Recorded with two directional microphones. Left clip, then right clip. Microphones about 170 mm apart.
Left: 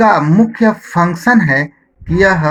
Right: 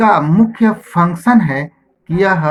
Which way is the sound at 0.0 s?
30° left (ahead or behind).